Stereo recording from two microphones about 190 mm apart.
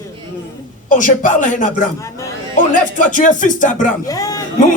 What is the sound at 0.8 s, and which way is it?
Speech, 40° left (ahead or behind).